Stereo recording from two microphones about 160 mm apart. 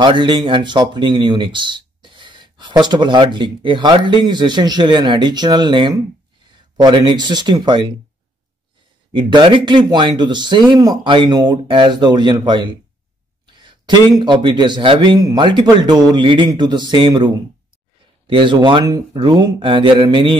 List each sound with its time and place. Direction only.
0.0 s speech: 30° right (ahead or behind)
9.1 s speech: 30° right (ahead or behind)
13.6 s a sound: 30° right (ahead or behind)
14.1 s speech: 30° right (ahead or behind)